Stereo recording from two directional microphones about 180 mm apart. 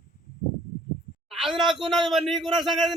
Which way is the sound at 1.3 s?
Centre (ahead or behind).